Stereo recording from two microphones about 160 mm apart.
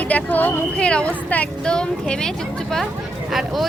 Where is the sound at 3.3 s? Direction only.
Centre (ahead or behind).